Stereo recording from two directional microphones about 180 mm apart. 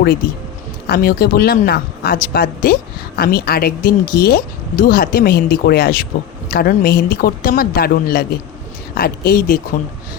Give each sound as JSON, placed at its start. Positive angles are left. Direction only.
{"t": 0.9, "sound": "speech", "side_deg": 55}